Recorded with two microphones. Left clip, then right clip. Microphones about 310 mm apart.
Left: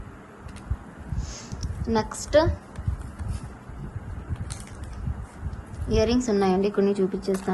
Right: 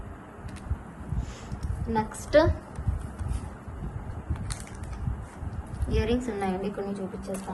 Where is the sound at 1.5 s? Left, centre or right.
Centre.